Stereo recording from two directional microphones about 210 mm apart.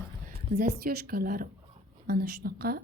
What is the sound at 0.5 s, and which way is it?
A woman's voice, 50° right (ahead or behind).